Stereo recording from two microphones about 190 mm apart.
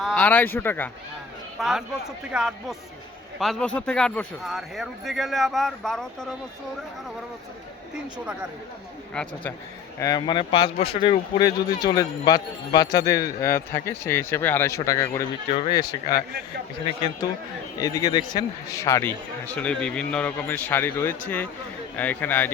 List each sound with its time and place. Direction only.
0.0 s a man's voice: 5° left (ahead or behind)
1.5 s a man's voice: centre (ahead or behind)
9.2 s a man's voice: 5° left (ahead or behind)
10.0 s speech: 20° left (ahead or behind)
17.7 s a man's voice: 20° left (ahead or behind)